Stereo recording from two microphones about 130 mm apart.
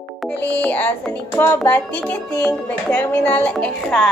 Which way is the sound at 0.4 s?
10° left (ahead or behind).